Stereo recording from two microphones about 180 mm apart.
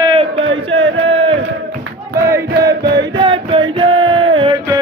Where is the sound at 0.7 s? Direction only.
90° right.